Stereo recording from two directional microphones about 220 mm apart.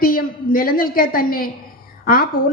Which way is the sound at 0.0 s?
40° left (ahead or behind).